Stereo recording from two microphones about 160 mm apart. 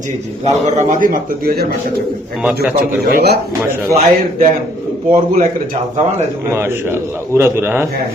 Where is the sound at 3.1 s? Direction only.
80° right.